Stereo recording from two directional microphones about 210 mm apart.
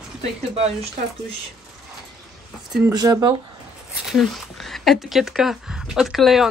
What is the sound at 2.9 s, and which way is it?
Speech, 20° right (ahead or behind).